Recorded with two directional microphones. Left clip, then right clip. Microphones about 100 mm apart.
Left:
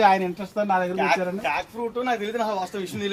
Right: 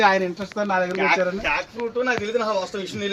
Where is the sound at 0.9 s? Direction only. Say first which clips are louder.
Right 2 dB; 30° left (ahead or behind).